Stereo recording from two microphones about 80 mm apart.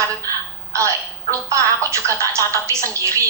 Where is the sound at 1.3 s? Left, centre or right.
Right.